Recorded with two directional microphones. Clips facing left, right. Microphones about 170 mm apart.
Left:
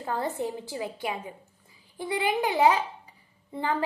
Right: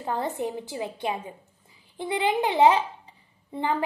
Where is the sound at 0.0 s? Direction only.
20° right (ahead or behind).